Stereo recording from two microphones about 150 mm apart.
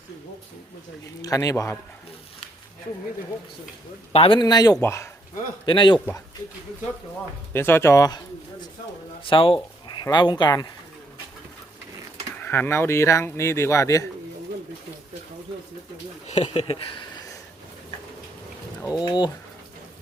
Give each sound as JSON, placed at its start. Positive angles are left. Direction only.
{"t": 1.2, "sound": "speech", "side_deg": 25}
{"t": 4.1, "sound": "speech", "side_deg": 35}
{"t": 5.6, "sound": "a man's voice", "side_deg": 30}
{"t": 7.5, "sound": "speech", "side_deg": 15}
{"t": 9.2, "sound": "speech", "side_deg": 35}
{"t": 12.4, "sound": "speech", "side_deg": 15}
{"t": 16.2, "sound": "speech", "side_deg": 45}
{"t": 19.0, "sound": "a man's voice", "side_deg": 30}